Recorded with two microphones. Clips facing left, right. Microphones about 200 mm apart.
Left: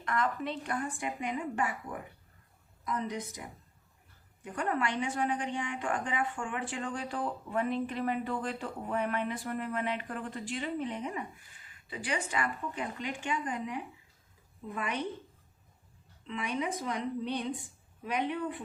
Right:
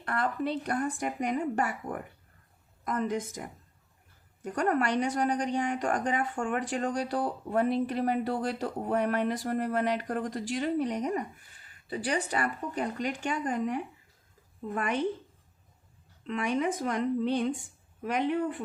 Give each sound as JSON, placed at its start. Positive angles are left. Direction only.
{"t": 0.0, "sound": "a woman's voice", "side_deg": -35}
{"t": 4.4, "sound": "a woman's voice", "side_deg": -45}
{"t": 16.2, "sound": "speech", "side_deg": -45}